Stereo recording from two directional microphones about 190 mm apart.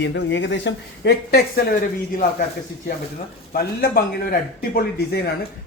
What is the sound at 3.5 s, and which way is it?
Speech, 50° left (ahead or behind).